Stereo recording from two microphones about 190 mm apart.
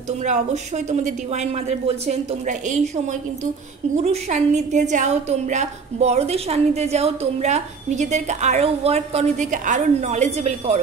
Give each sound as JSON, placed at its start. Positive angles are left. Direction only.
{"t": 0.2, "sound": "a woman's voice", "side_deg": -40}